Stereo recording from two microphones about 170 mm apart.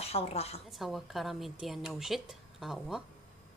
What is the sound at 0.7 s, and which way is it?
Speech, centre (ahead or behind).